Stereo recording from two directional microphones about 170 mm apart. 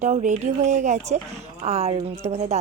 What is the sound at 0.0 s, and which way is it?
Speech, 45° right (ahead or behind).